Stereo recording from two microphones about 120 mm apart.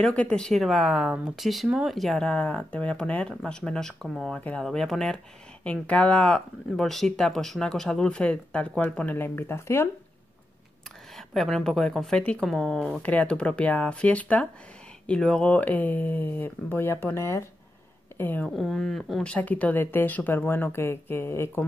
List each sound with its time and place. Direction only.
0.0 s speech: 10° left (ahead or behind)
11.1 s speech: centre (ahead or behind)
13.0 s a woman's voice: 10° left (ahead or behind)
18.6 s speech: centre (ahead or behind); by 21.5 s 20° left (ahead or behind)